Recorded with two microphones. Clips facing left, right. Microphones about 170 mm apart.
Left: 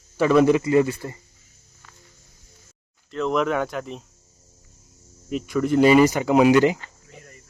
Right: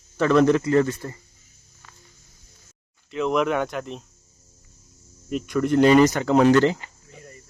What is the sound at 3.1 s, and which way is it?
Speech, 5° right (ahead or behind).